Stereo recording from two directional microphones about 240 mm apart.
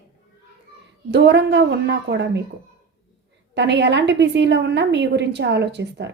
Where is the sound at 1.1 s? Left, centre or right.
Right.